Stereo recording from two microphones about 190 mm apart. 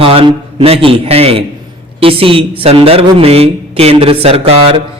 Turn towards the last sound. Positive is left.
turn(degrees=-30)  # may be behind; listen again after turning